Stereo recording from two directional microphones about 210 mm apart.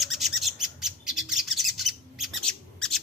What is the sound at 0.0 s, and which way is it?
Bird, centre (ahead or behind).